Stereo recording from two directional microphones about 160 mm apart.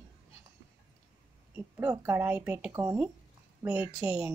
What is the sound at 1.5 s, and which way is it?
A woman's voice, 15° right (ahead or behind).